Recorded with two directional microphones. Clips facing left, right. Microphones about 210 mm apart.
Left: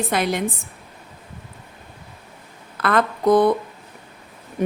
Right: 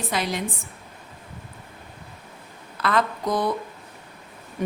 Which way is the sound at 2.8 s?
55° left (ahead or behind).